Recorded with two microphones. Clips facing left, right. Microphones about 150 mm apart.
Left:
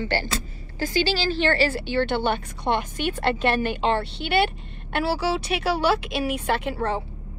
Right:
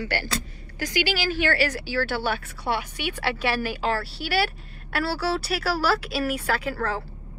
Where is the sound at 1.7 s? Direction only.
5° right (ahead or behind).